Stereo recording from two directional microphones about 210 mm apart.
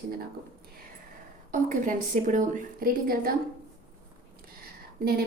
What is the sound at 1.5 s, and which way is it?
A woman's voice, 40° right (ahead or behind).